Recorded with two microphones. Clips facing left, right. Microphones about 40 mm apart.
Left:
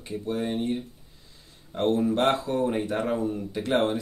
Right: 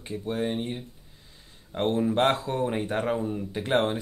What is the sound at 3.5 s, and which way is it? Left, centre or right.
Mantra, right.